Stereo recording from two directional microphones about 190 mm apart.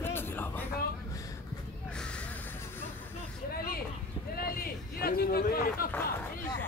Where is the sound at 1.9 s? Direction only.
5° left (ahead or behind).